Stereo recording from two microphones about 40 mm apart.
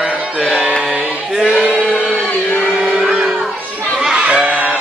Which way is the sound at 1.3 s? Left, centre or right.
Centre.